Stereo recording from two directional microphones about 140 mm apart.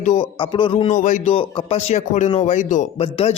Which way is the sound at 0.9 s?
65° left (ahead or behind).